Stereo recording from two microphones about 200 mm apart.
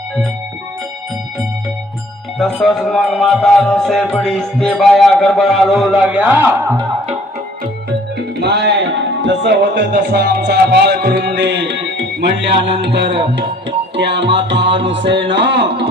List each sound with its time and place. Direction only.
2.4 s music: centre (ahead or behind)
8.4 s music: 55° right (ahead or behind)